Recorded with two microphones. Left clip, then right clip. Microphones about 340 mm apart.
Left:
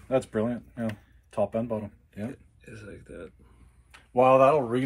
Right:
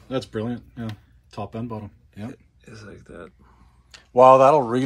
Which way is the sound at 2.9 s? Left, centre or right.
Right.